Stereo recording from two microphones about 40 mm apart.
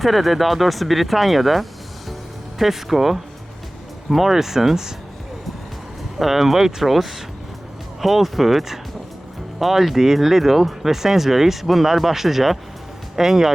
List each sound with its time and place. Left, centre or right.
0.0 s speech: centre
6.1 s speech: centre